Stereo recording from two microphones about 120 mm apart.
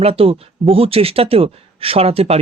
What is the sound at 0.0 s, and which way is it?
Speech, 55° right (ahead or behind).